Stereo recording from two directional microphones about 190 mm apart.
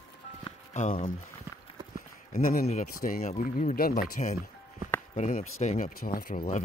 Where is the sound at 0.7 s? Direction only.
35° left (ahead or behind).